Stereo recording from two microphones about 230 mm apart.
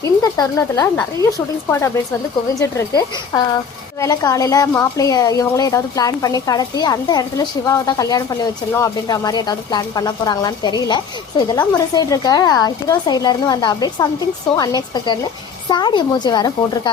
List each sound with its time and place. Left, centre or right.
0.0 s a woman's voice: centre
2.6 s a woman's voice: centre